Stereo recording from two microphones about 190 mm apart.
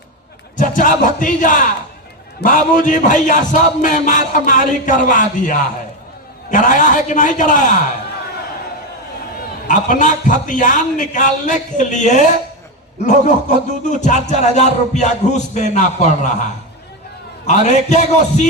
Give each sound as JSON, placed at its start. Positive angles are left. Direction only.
{"t": 0.5, "sound": "a man's voice", "side_deg": 45}
{"t": 9.6, "sound": "a man's voice", "side_deg": 40}
{"t": 17.4, "sound": "speech", "side_deg": 40}